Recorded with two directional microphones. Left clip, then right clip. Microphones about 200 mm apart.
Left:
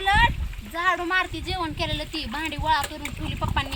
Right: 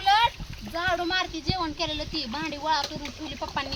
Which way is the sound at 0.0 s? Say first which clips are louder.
Left 1 dB; 50° right (ahead or behind).